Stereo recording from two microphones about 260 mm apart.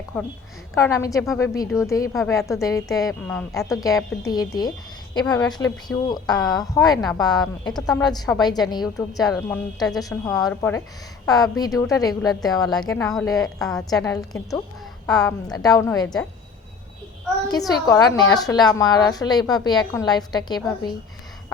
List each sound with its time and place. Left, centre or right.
0.8 s a woman's voice: centre
17.5 s a woman's voice: centre